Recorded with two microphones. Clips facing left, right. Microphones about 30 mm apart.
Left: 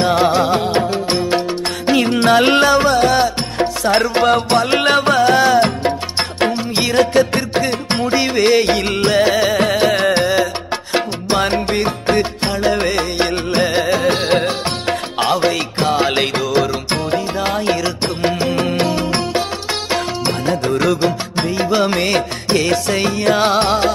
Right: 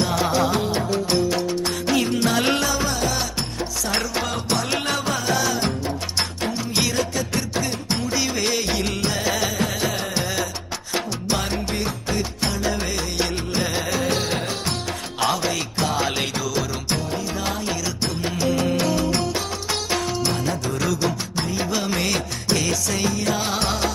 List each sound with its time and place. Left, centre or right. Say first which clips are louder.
0.0 s music: left 7 dB; left
1.9 s music: left 9 dB; left
6.5 s music: left 5 dB; left
6.9 s music: left 11 dB; left
9.3 s music: left 9 dB; left
9.6 s music: left 10 dB; left
10.2 s music: left 10 dB; left
16.1 s music: left 8 dB; left